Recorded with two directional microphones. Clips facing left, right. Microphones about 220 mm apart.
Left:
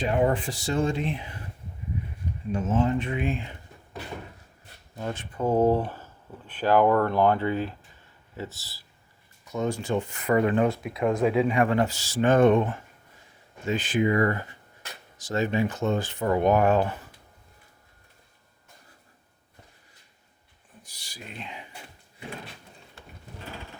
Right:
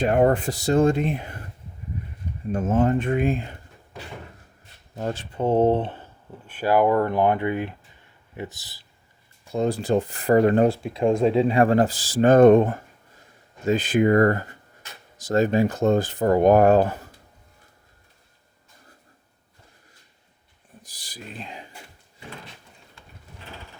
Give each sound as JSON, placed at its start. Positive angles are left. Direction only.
{"t": 0.0, "sound": "speech", "side_deg": -55}
{"t": 2.5, "sound": "speech", "side_deg": -55}
{"t": 4.9, "sound": "speech", "side_deg": -35}
{"t": 6.5, "sound": "speech", "side_deg": -10}
{"t": 9.4, "sound": "speech", "side_deg": -30}
{"t": 20.8, "sound": "speech", "side_deg": -35}